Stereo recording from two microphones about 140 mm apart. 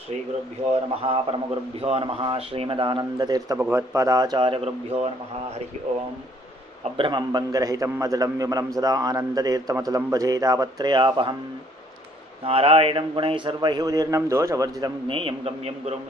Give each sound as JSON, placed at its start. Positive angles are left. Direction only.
{"t": 0.6, "sound": "a man's voice", "side_deg": -45}
{"t": 3.5, "sound": "a man's voice", "side_deg": -15}
{"t": 6.8, "sound": "a man's voice", "side_deg": -35}
{"t": 12.4, "sound": "a man's voice", "side_deg": -40}
{"t": 15.0, "sound": "a man's voice", "side_deg": -40}